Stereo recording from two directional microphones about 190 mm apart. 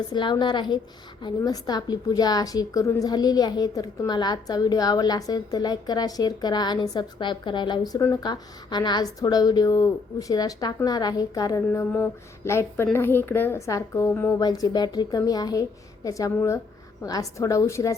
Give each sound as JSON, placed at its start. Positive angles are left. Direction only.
{"t": 0.1, "sound": "a woman's voice", "side_deg": 25}